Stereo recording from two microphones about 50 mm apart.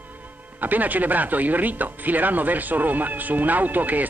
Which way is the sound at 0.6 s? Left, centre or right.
Right.